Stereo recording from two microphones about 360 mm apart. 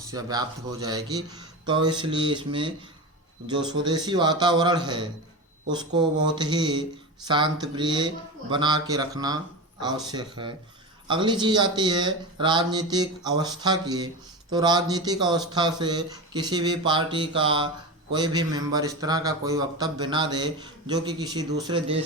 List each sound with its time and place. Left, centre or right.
0.1 s a man's voice: centre